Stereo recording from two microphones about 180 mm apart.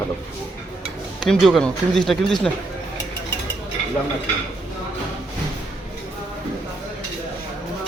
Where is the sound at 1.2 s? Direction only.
Centre (ahead or behind).